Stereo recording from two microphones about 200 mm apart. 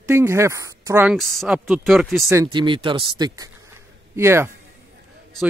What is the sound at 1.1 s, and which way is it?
Speech, centre (ahead or behind).